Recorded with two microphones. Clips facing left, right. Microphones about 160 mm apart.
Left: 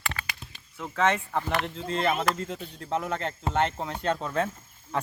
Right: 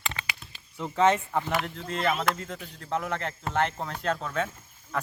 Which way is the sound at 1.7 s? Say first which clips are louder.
Left 1 dB; 30° left (ahead or behind).